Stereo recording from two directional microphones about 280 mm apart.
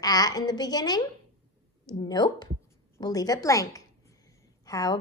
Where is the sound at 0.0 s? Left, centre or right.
Centre.